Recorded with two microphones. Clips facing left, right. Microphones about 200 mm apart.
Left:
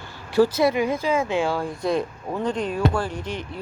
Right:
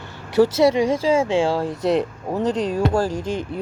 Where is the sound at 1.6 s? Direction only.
85° right.